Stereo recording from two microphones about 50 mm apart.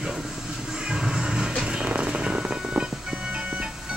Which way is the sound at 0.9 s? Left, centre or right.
Centre.